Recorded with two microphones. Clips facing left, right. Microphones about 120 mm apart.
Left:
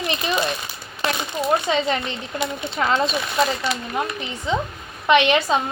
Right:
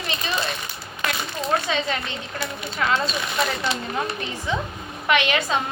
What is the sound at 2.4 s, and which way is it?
Speech, 25° left (ahead or behind).